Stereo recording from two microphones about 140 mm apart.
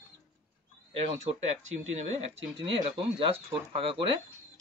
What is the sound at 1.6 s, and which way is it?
Speech, 55° right (ahead or behind).